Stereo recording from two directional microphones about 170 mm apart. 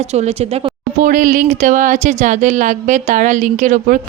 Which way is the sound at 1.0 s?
55° right (ahead or behind).